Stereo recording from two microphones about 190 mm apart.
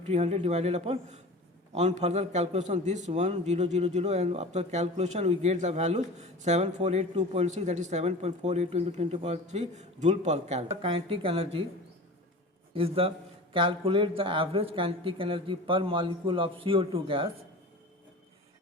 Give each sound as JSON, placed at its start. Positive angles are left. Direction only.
{"t": 0.1, "sound": "a man's voice", "side_deg": -35}
{"t": 12.7, "sound": "a man's voice", "side_deg": -30}